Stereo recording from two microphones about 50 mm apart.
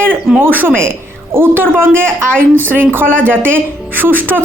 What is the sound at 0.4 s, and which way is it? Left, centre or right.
A woman's voice, right.